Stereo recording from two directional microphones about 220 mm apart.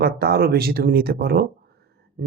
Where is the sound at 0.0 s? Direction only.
45° right (ahead or behind).